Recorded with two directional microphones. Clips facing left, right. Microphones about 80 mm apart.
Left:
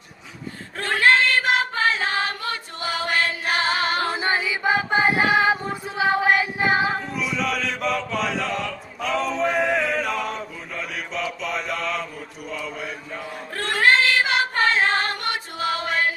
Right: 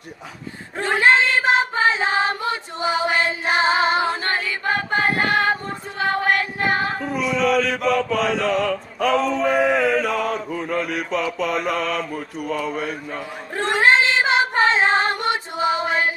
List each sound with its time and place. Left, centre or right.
0.7 s a sound: centre
4.1 s a sound: centre
7.2 s chant: centre
10.3 s mantra: right
11.6 s mantra: right
13.6 s female singing: right